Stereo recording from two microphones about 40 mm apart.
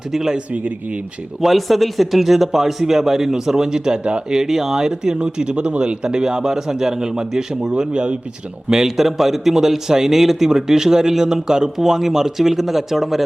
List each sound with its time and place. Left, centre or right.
0.1 s a man's voice: centre
0.5 s speech: right
1.4 s a man's voice: centre; by 4.2 s right
4.3 s a man's voice: centre; by 8.2 s right
8.7 s a man's voice: centre